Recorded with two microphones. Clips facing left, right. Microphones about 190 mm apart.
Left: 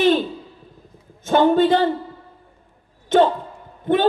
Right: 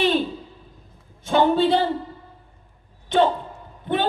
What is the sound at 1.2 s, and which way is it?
Speech, 50° left (ahead or behind).